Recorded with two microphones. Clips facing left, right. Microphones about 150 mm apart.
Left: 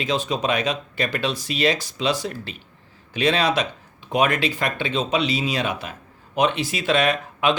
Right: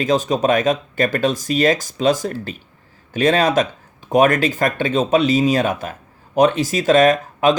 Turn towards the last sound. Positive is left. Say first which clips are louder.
# right 6 dB
turn(degrees=-40)  # may be behind; listen again after turning